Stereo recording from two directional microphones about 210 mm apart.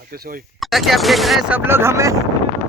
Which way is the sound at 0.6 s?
Centre (ahead or behind).